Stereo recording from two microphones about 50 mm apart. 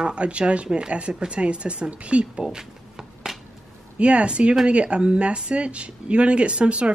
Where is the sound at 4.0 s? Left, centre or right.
Right.